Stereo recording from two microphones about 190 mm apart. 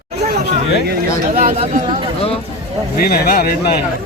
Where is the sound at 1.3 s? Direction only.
40° right (ahead or behind).